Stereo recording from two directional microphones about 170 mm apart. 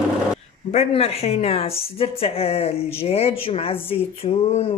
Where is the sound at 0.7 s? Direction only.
40° left (ahead or behind).